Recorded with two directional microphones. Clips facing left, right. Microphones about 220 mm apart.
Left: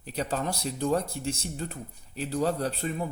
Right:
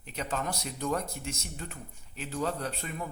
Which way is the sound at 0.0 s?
35° left (ahead or behind).